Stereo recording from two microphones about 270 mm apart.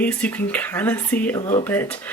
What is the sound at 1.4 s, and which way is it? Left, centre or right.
Speech, left.